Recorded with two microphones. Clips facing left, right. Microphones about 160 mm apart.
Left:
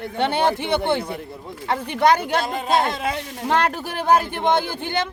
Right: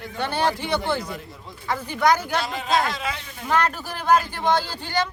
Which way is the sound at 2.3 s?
50° left (ahead or behind).